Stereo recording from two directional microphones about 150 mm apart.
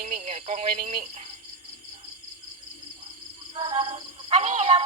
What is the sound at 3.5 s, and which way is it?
Music, 35° right (ahead or behind).